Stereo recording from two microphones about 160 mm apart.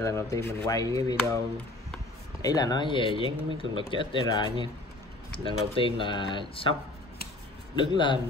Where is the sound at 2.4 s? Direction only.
25° left (ahead or behind).